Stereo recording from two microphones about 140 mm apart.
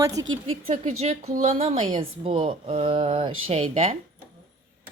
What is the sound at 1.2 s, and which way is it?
Speech, 65° right (ahead or behind).